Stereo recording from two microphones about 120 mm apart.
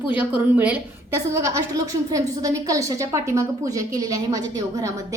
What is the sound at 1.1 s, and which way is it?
A woman's voice, 25° right (ahead or behind).